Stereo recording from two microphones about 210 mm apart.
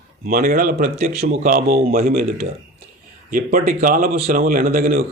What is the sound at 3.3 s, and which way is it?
Speech, 40° right (ahead or behind).